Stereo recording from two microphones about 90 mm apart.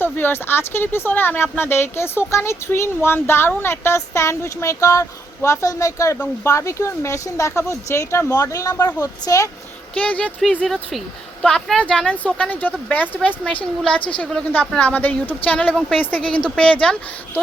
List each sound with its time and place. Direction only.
0.0 s speech: 25° left (ahead or behind); by 9.5 s 40° left (ahead or behind)
9.9 s speech: 15° left (ahead or behind)
11.4 s speech: 10° left (ahead or behind)